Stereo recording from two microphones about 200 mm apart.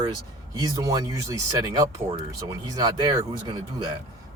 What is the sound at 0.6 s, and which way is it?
Speech, 20° right (ahead or behind).